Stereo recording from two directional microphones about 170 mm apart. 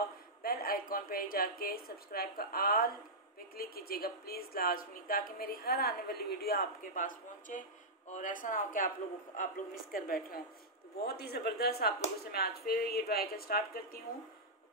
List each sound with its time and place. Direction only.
0.4 s a woman's voice: 60° left (ahead or behind)
9.9 s a woman's voice: 60° left (ahead or behind)
11.1 s a woman's voice: 70° left (ahead or behind)